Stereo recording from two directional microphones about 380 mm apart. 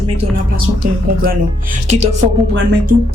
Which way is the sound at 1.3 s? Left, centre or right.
Centre.